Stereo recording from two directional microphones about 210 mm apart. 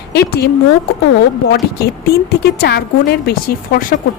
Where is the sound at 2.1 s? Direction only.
50° left (ahead or behind).